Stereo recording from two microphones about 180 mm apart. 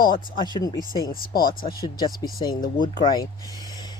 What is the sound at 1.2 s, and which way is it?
Speech, 55° left (ahead or behind).